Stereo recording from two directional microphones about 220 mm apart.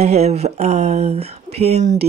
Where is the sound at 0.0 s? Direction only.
30° right (ahead or behind).